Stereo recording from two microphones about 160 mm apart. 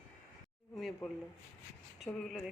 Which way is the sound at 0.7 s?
Centre (ahead or behind).